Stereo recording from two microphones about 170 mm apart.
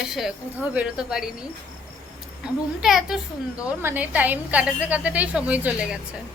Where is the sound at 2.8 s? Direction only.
Centre (ahead or behind).